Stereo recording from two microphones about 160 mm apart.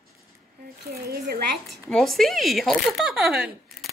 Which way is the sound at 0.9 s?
75° right (ahead or behind).